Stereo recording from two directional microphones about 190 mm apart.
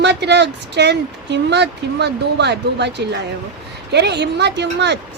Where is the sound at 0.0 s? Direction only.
65° right (ahead or behind).